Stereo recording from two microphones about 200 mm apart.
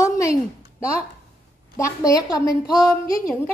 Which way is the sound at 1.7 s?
15° left (ahead or behind).